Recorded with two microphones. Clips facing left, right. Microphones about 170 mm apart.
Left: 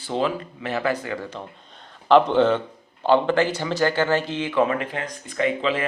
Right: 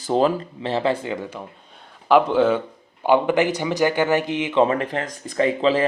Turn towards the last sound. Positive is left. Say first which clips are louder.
# right 4 dB
turn(degrees=-35)  # may be behind; listen again after turning